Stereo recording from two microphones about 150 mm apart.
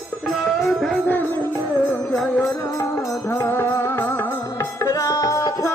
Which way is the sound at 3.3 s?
15° left (ahead or behind).